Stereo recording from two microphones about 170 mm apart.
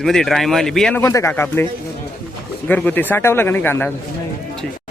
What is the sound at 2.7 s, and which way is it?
Speech, 10° left (ahead or behind).